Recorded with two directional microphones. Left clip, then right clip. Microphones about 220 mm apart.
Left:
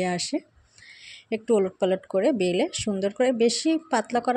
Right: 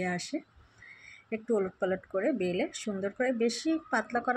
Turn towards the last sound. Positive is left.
turn(degrees=35)  # may be behind; listen again after turning